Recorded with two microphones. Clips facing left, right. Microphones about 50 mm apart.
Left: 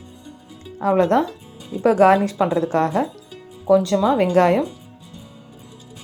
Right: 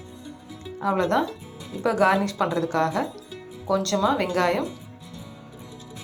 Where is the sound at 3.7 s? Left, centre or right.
Centre.